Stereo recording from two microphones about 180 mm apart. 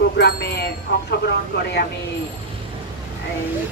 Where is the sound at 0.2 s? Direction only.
65° left (ahead or behind).